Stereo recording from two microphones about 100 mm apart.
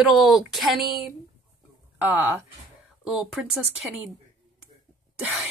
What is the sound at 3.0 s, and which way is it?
Speech, 5° right (ahead or behind).